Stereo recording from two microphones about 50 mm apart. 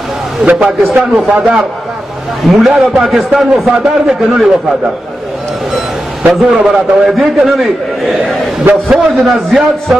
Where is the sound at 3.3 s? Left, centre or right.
Centre.